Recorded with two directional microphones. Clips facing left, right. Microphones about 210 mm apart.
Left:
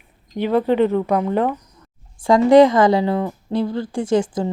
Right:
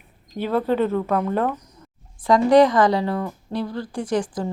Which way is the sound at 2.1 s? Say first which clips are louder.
Left 4 dB; 25° left (ahead or behind).